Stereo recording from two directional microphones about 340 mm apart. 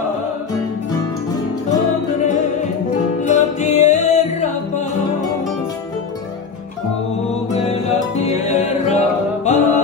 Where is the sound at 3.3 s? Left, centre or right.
Left.